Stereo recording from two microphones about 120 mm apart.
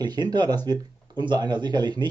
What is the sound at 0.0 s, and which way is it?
Speech, 35° right (ahead or behind).